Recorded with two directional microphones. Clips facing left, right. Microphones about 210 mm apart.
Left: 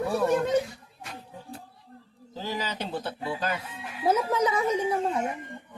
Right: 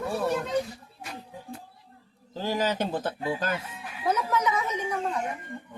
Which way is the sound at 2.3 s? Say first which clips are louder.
Right 5 dB; 50° right (ahead or behind).